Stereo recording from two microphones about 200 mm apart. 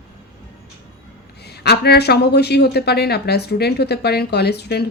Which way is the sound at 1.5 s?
55° left (ahead or behind).